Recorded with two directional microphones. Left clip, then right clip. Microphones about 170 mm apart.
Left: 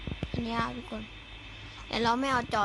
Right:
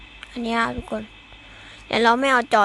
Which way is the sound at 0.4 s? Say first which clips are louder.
Right 11 dB; 50° right (ahead or behind).